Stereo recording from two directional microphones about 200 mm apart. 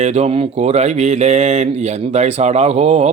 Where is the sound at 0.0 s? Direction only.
30° right (ahead or behind).